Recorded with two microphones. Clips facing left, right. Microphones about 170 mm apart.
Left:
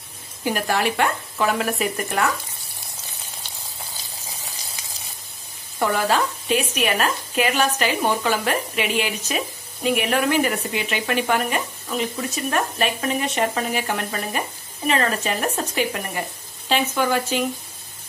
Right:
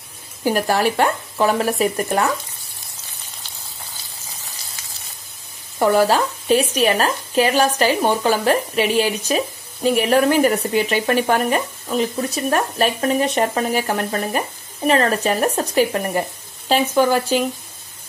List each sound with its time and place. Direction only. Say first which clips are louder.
0.4 s speech: right 4 dB; 40° right (ahead or behind)
5.8 s speech: right 5 dB; 35° right (ahead or behind)